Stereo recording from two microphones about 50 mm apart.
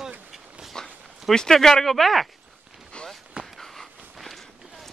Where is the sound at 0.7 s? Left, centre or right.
Centre.